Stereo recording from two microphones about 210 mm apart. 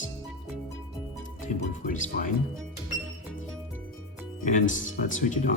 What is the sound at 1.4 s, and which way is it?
Speech, 35° left (ahead or behind).